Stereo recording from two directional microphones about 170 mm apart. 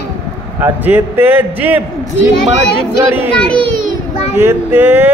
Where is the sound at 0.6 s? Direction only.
10° right (ahead or behind).